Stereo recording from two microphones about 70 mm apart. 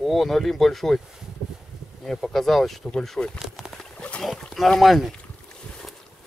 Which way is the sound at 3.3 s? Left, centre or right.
Centre.